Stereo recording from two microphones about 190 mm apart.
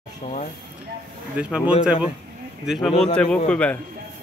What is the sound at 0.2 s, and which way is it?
Speech, 35° left (ahead or behind).